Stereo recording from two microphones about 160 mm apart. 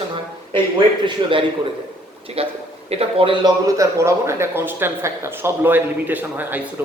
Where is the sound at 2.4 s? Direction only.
40° right (ahead or behind).